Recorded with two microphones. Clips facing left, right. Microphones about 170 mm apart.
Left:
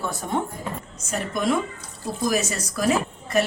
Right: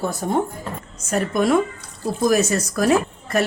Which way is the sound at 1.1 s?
60° right (ahead or behind).